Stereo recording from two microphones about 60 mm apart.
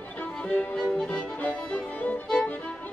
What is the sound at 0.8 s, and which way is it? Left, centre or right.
Music, centre.